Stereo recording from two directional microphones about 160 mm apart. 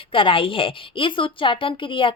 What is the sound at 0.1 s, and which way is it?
A woman's voice, 35° left (ahead or behind).